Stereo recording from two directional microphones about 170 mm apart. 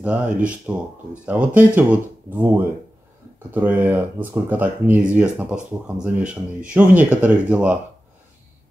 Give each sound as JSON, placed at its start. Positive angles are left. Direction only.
{"t": 0.0, "sound": "speech", "side_deg": -5}